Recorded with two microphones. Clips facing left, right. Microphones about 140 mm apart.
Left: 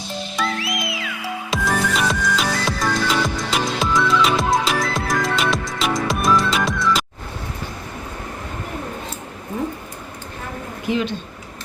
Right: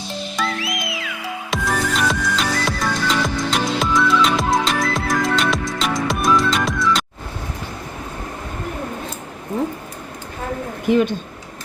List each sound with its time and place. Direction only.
0.3 s music: centre (ahead or behind)
10.8 s speech: 50° right (ahead or behind)